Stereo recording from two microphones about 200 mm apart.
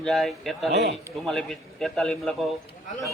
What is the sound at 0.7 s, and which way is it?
Speech, 60° right (ahead or behind).